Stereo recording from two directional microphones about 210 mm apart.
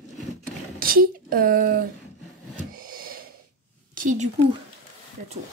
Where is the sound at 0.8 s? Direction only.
45° right (ahead or behind).